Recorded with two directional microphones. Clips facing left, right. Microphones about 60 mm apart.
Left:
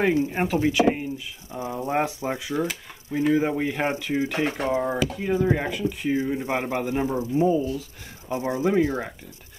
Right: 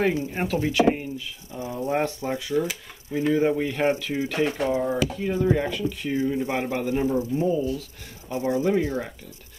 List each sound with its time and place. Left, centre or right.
0.0 s speech: centre